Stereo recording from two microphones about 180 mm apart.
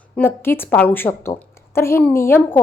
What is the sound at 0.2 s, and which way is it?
A woman's voice, 10° left (ahead or behind).